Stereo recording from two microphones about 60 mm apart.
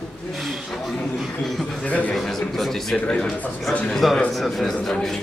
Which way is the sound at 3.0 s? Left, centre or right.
Centre.